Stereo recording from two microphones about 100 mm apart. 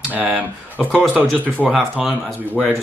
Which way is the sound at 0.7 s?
10° left (ahead or behind).